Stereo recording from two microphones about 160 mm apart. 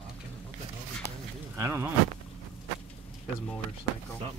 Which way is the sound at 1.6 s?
15° right (ahead or behind).